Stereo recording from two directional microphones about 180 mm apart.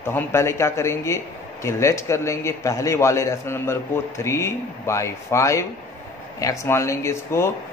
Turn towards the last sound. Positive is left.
turn(degrees=15)  # may be behind; listen again after turning